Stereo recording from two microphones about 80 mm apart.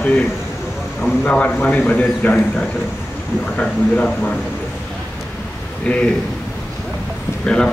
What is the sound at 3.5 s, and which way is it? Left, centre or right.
Speech, centre.